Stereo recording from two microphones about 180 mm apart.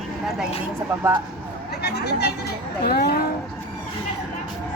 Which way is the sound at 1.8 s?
65° left (ahead or behind).